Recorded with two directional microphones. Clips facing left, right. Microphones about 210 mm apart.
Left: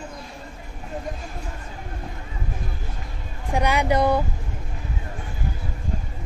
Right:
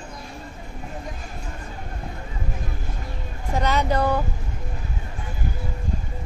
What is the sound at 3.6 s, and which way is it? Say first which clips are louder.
Speech: left 2 dB; 10° left (ahead or behind).